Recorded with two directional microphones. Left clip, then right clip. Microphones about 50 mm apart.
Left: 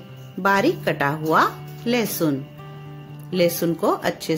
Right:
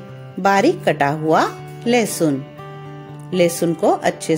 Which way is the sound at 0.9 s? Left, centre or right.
Right.